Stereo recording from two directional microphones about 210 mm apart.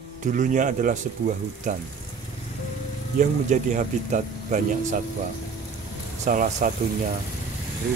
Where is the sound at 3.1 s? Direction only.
35° right (ahead or behind).